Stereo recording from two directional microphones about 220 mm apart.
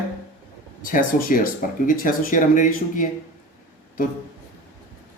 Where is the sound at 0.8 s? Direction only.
40° left (ahead or behind).